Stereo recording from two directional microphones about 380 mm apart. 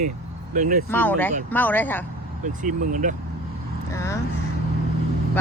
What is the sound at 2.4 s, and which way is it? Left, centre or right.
Speech, right.